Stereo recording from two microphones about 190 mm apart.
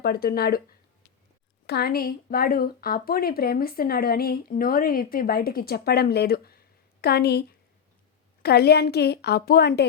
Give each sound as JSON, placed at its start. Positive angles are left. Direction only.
{"t": 0.0, "sound": "a woman's voice", "side_deg": 55}
{"t": 1.6, "sound": "a woman's voice", "side_deg": 55}